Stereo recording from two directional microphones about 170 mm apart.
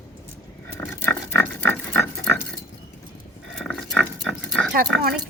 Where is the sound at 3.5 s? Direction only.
Centre (ahead or behind).